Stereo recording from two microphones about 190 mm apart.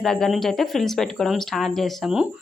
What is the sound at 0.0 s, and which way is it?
Speech, 5° left (ahead or behind).